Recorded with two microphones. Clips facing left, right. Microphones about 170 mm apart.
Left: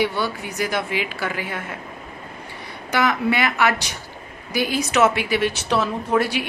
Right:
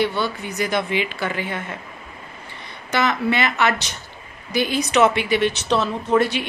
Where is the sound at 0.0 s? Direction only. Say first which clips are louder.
Right 1 dB; 10° left (ahead or behind).